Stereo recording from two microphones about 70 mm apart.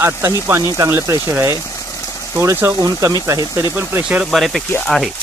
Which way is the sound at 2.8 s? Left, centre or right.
Right.